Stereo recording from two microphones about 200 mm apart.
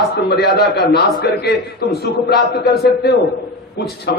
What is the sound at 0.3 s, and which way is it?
A man's voice, 55° left (ahead or behind).